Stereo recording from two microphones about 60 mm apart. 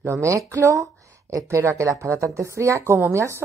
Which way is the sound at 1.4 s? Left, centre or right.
Right.